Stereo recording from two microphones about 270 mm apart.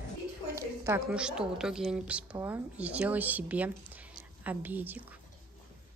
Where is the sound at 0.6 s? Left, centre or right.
Centre.